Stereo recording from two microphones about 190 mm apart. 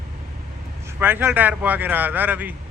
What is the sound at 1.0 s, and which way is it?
A man's voice, 10° right (ahead or behind).